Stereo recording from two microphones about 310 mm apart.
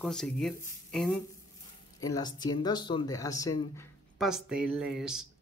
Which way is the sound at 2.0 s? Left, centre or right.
Centre.